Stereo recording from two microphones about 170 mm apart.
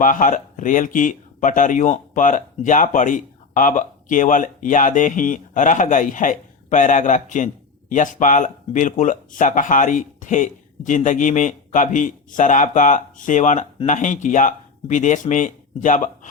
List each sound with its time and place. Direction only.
0.0 s speech: 50° left (ahead or behind)